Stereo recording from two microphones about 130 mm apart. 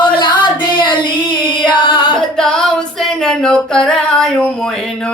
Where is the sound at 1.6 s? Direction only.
35° left (ahead or behind).